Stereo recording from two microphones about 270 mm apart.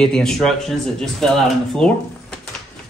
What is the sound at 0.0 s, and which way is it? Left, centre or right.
Speech, centre.